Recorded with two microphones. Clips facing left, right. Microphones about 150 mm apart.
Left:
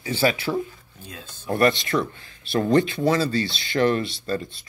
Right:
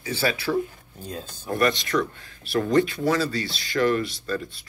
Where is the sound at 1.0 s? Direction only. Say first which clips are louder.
Right 6 dB; 35° right (ahead or behind).